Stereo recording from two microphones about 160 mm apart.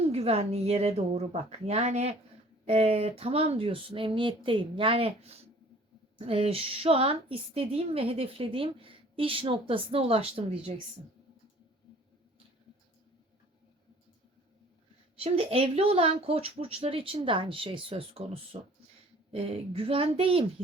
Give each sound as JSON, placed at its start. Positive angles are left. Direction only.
{"t": 0.0, "sound": "a woman's voice", "side_deg": -40}
{"t": 15.2, "sound": "a woman's voice", "side_deg": -35}